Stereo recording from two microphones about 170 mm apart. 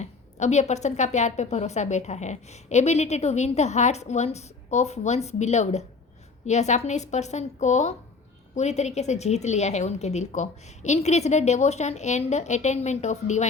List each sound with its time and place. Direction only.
0.0 s a woman's voice: 40° left (ahead or behind)